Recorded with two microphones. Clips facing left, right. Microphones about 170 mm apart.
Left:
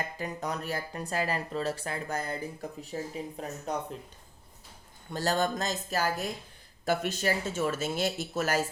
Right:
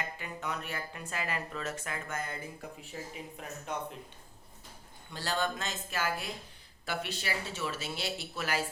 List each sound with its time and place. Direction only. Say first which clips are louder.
0.2 s speech: left 5 dB; 40° left (ahead or behind)
5.1 s speech: left 5 dB; 45° left (ahead or behind)